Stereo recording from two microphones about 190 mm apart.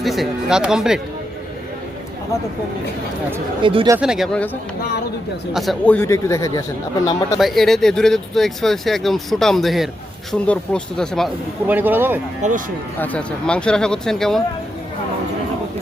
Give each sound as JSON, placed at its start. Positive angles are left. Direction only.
{"t": 0.0, "sound": "speech", "side_deg": 0}
{"t": 3.6, "sound": "speech", "side_deg": -30}
{"t": 4.0, "sound": "speech", "side_deg": 0}
{"t": 5.5, "sound": "speech", "side_deg": 5}
{"t": 7.3, "sound": "speech", "side_deg": 0}
{"t": 11.7, "sound": "speech", "side_deg": -10}
{"t": 12.4, "sound": "speech", "side_deg": -45}
{"t": 13.0, "sound": "speech", "side_deg": 5}